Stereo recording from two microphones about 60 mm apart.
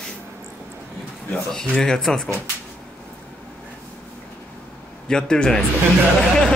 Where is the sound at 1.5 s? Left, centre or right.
Centre.